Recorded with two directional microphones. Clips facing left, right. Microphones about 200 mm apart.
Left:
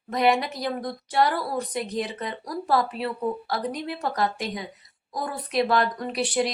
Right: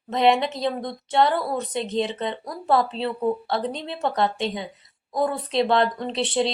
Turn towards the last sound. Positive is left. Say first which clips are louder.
# right 2 dB
turn(degrees=-25)  # may be behind; listen again after turning